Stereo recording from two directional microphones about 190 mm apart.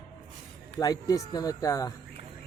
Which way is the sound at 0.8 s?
20° left (ahead or behind).